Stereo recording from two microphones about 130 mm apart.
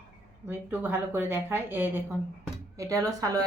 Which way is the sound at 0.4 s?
15° right (ahead or behind).